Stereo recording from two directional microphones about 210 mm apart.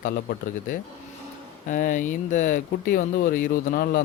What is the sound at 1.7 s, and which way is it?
A man's voice, 40° left (ahead or behind).